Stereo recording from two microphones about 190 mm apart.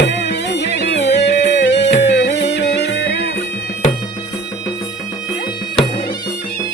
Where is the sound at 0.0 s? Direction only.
65° left (ahead or behind).